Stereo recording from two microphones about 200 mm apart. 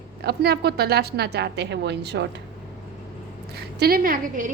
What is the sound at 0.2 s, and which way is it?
A woman's voice, 55° right (ahead or behind).